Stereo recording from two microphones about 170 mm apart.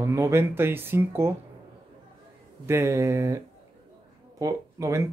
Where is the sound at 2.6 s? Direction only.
15° right (ahead or behind).